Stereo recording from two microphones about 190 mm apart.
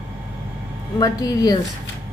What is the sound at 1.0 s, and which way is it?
Speech, 20° left (ahead or behind).